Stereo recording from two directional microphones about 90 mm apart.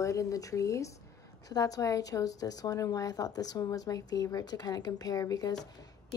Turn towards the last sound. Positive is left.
turn(degrees=45)  # may be behind; listen again after turning